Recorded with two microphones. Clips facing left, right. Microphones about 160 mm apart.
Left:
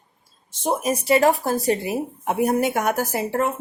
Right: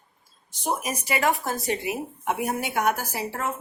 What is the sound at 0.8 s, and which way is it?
A woman's voice, 30° left (ahead or behind).